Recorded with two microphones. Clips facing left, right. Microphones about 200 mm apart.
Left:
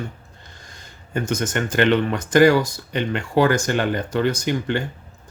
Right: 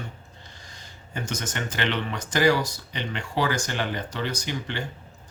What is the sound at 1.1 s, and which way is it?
Speech, 55° left (ahead or behind).